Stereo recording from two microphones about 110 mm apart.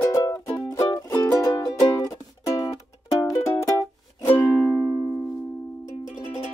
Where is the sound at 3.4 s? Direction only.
30° left (ahead or behind).